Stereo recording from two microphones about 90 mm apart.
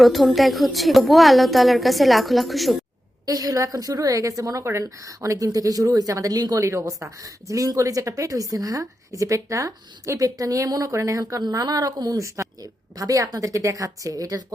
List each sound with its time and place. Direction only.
0.0 s a woman's voice: centre (ahead or behind)
3.2 s a woman's voice: 45° right (ahead or behind)